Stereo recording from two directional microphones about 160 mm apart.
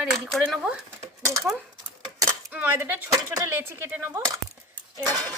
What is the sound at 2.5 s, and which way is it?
A woman's voice, 10° right (ahead or behind).